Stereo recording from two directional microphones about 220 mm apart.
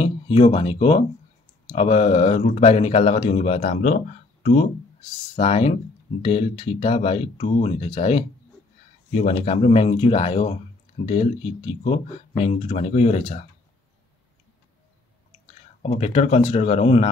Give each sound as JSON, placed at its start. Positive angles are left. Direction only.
{"t": 0.0, "sound": "speech", "side_deg": 25}
{"t": 15.8, "sound": "speech", "side_deg": 30}